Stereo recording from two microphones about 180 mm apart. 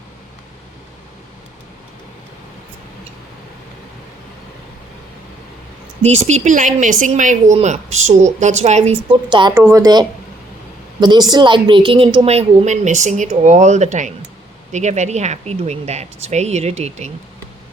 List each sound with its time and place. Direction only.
6.0 s speech: 35° right (ahead or behind)
9.6 s a woman's voice: 15° right (ahead or behind); by 17.1 s 40° right (ahead or behind)